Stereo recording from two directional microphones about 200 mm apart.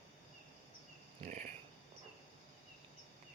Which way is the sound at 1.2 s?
40° right (ahead or behind).